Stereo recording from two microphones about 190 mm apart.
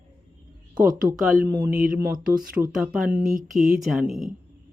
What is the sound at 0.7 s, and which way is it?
Speech, 10° right (ahead or behind).